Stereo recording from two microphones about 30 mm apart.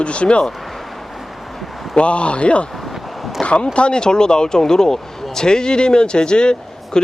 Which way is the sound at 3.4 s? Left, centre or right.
Left.